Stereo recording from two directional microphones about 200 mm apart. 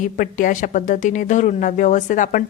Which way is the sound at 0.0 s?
40° left (ahead or behind).